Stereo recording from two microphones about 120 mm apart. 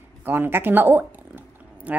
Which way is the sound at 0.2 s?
15° right (ahead or behind).